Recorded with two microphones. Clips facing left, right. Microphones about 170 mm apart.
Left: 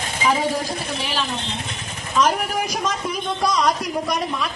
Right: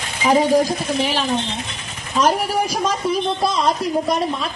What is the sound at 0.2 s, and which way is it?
A woman's voice, 40° right (ahead or behind).